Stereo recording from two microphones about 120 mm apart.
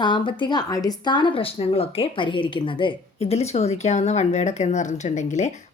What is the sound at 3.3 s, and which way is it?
A woman's voice, 60° left (ahead or behind).